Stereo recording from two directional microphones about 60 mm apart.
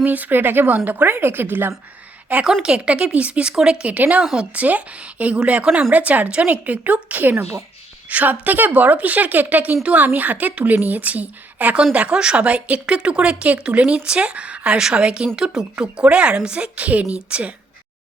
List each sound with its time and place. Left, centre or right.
0.0 s a woman's voice: right
2.4 s speech: centre
3.8 s a woman's voice: right